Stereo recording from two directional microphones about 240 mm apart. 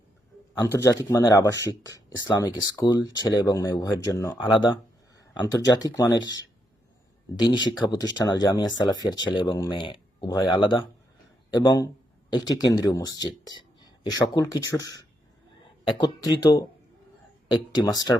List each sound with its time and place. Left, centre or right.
0.5 s speech: centre
7.7 s speech: centre